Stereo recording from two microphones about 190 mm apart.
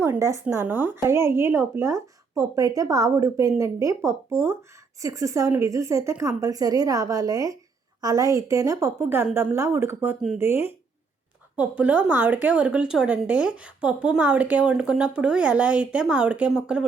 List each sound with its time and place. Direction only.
0.0 s speech: 15° right (ahead or behind)
11.8 s speech: 5° right (ahead or behind)